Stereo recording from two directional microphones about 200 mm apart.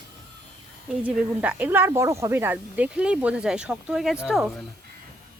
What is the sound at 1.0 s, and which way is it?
Speech, 10° right (ahead or behind).